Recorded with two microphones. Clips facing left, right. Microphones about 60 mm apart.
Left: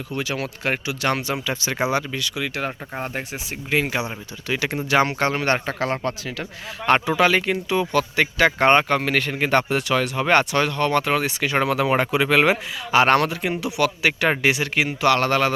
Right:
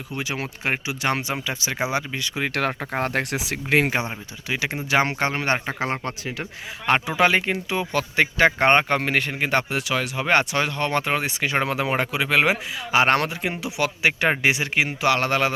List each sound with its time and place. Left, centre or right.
0.1 s speech: centre
2.2 s speech: right
2.6 s speech: right
3.8 s speech: right
4.4 s speech: centre
6.8 s speech: centre
7.2 s speech: right
11.9 s speech: centre